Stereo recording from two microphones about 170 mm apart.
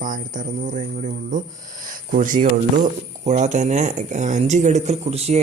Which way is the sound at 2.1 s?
50° right (ahead or behind).